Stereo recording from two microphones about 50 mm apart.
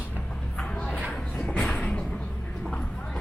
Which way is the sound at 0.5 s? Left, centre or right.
Left.